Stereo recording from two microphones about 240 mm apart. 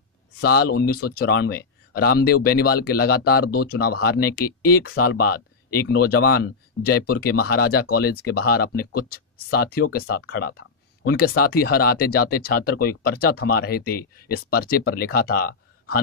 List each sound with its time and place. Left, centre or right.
0.4 s speech: left